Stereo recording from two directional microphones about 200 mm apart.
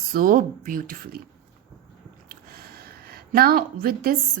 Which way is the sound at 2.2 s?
50° right (ahead or behind).